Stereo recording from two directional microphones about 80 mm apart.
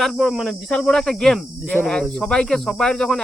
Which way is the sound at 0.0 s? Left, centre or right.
Centre.